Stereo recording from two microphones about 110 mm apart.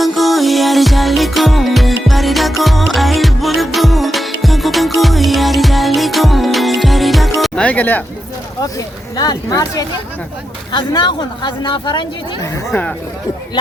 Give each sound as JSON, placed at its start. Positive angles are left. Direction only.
{"t": 0.0, "sound": "music", "side_deg": 0}
{"t": 7.6, "sound": "speech", "side_deg": 15}
{"t": 9.1, "sound": "speech", "side_deg": 35}